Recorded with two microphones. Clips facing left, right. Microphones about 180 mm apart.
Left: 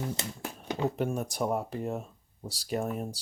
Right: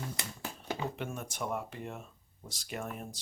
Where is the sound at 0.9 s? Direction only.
40° left (ahead or behind).